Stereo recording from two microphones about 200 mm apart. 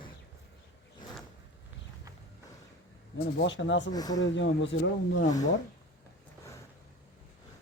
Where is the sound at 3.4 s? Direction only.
65° left (ahead or behind).